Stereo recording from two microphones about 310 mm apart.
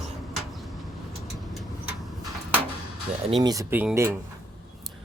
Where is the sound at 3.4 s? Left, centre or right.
Centre.